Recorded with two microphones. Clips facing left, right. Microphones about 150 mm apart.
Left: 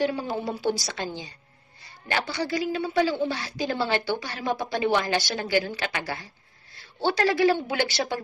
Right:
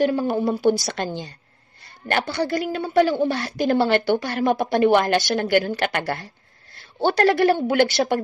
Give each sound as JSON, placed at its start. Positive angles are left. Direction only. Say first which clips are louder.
{"t": 0.0, "sound": "a woman's voice", "louder": "right 7 dB", "side_deg": -55}